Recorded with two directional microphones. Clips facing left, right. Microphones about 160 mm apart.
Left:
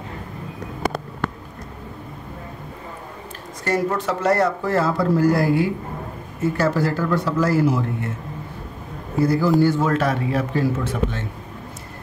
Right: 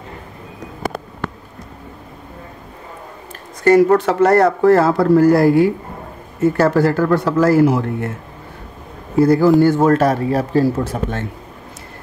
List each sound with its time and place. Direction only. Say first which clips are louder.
3.6 s speech: right 11 dB; 65° right (ahead or behind)
9.2 s a man's voice: right 6 dB; 55° right (ahead or behind); by 11.1 s 35° right (ahead or behind)